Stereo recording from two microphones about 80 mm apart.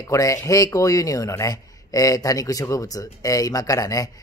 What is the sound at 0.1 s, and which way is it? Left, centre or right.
Speech, left.